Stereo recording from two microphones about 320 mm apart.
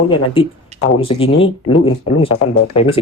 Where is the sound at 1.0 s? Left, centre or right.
Centre.